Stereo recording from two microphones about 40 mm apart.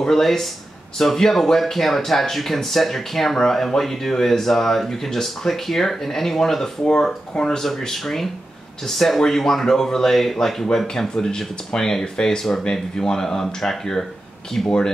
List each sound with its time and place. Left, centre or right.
0.1 s speech: centre